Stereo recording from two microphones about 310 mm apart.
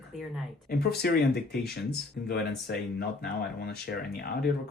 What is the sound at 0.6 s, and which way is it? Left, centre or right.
Speech, left.